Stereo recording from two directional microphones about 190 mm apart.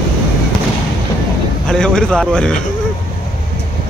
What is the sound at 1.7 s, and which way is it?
Speech, 5° left (ahead or behind).